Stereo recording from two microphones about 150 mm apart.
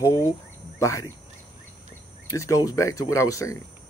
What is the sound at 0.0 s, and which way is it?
Speech, 20° left (ahead or behind).